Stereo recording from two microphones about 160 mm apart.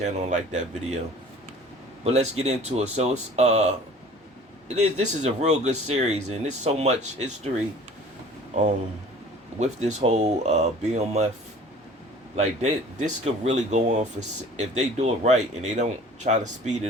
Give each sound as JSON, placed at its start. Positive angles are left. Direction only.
{"t": 0.0, "sound": "speech", "side_deg": -45}
{"t": 2.0, "sound": "speech", "side_deg": -45}
{"t": 4.7, "sound": "speech", "side_deg": -45}
{"t": 9.6, "sound": "speech", "side_deg": -45}
{"t": 12.4, "sound": "speech", "side_deg": -45}